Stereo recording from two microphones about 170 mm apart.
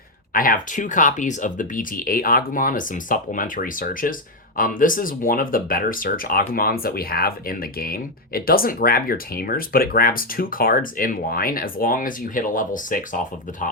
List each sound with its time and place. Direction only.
0.3 s speech: 55° left (ahead or behind)